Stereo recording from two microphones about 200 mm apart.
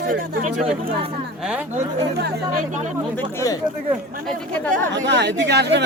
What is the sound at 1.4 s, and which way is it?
Speech, 5° right (ahead or behind).